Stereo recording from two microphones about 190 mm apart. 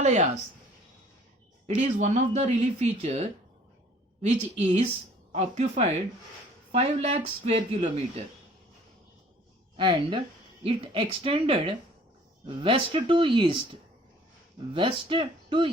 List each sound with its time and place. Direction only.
0.0 s speech: 35° right (ahead or behind)
1.6 s speech: 40° right (ahead or behind)
9.7 s speech: 25° right (ahead or behind)